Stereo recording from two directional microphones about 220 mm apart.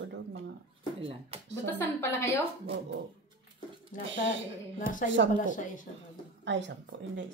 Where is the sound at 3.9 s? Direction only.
35° left (ahead or behind).